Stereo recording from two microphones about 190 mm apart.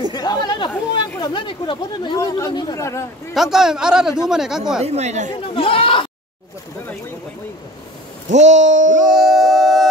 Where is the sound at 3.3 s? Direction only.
Centre (ahead or behind).